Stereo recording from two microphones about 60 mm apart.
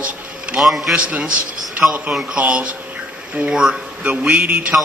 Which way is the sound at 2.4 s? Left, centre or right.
Right.